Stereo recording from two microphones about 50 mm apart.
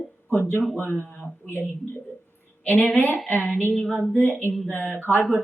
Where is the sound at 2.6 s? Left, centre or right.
Left.